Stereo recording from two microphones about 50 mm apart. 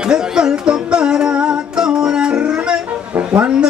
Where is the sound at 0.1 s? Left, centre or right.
Centre.